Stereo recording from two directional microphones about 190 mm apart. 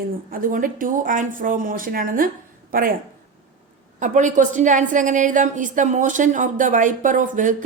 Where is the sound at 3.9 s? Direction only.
40° right (ahead or behind).